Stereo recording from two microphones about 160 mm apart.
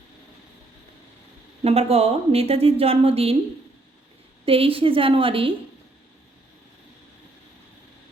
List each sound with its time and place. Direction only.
1.6 s a woman's voice: 40° right (ahead or behind)
4.4 s a woman's voice: 35° right (ahead or behind)